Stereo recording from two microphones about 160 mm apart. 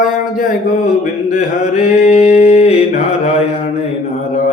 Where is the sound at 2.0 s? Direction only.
45° left (ahead or behind).